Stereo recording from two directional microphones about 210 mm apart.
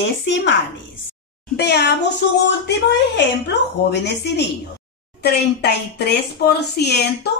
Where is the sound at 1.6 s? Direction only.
50° left (ahead or behind).